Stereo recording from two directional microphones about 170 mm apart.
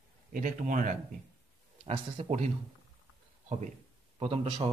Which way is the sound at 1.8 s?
35° right (ahead or behind).